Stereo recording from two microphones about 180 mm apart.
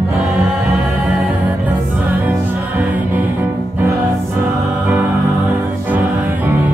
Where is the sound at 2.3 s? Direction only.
10° right (ahead or behind).